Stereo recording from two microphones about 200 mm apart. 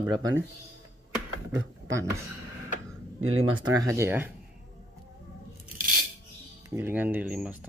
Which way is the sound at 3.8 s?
15° right (ahead or behind).